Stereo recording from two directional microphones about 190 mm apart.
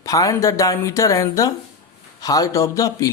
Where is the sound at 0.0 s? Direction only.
20° left (ahead or behind).